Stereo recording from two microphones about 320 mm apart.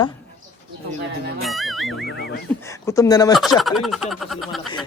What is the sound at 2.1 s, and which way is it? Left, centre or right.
Speech, left.